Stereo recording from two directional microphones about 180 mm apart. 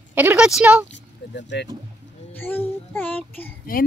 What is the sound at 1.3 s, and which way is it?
Speech, 75° left (ahead or behind).